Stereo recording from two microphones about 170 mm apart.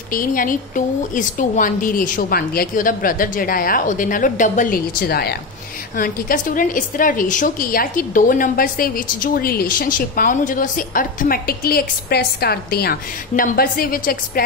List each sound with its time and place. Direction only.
0.1 s a woman's voice: 55° left (ahead or behind)